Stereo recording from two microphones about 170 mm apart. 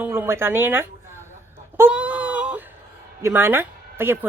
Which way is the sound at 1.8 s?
10° right (ahead or behind).